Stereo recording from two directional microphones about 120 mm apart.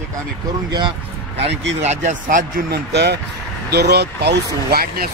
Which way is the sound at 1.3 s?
75° right (ahead or behind).